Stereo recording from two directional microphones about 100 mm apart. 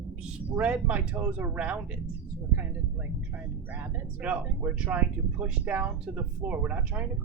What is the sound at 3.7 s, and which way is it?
Speech, 20° right (ahead or behind).